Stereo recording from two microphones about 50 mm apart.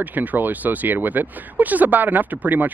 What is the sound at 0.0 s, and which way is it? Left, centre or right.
Speech, right.